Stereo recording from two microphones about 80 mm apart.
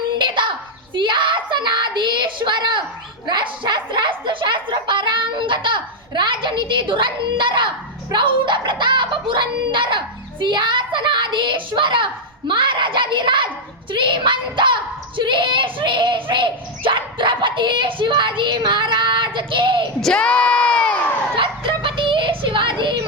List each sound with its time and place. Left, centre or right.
0.2 s a sound: right
8.1 s a woman's voice: right
10.4 s a woman's voice: right
20.0 s crowd: centre
21.3 s child singing: right